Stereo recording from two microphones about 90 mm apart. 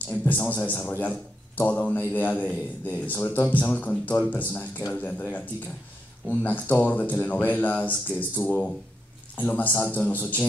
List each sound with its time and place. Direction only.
0.1 s a man's voice: 25° left (ahead or behind)